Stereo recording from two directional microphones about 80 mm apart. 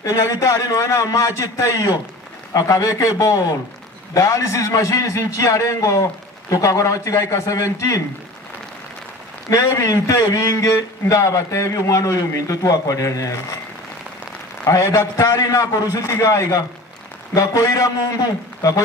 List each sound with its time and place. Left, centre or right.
0.0 s a man's voice: left
9.5 s a man's voice: left
14.6 s a man's voice: left